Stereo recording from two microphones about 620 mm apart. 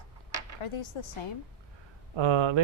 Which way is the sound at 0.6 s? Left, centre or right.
Left.